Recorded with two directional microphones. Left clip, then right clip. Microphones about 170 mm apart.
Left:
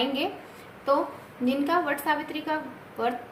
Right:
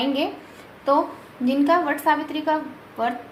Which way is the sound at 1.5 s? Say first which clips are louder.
Right 6 dB; 35° right (ahead or behind).